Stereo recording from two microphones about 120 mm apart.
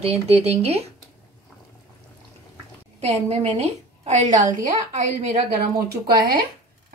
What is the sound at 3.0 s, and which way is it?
A woman's voice, 60° right (ahead or behind).